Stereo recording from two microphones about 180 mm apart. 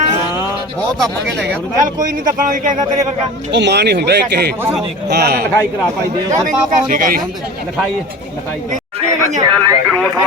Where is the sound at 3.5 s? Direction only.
70° right (ahead or behind).